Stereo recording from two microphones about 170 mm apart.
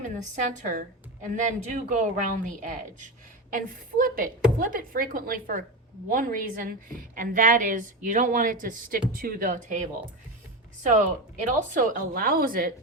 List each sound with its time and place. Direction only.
0.0 s a woman's voice: 45° right (ahead or behind)
10.8 s a woman's voice: 50° right (ahead or behind)